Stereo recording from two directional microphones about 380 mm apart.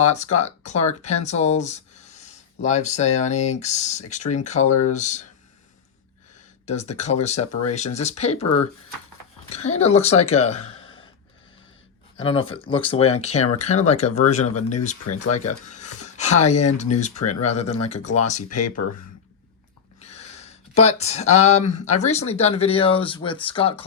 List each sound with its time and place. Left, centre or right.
0.0 s speech: centre
6.7 s speech: centre
9.5 s speech: centre
10.6 s speech: left
12.2 s speech: centre
15.0 s speech: left
15.4 s speech: centre
20.0 s speech: centre